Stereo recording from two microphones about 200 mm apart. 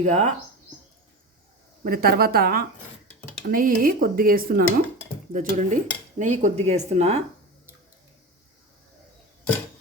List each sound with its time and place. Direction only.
0.0 s dishes: 35° right (ahead or behind)
1.8 s speech: 50° right (ahead or behind)
5.3 s dishes: 40° right (ahead or behind)